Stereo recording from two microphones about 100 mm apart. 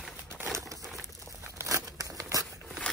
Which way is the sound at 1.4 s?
30° right (ahead or behind).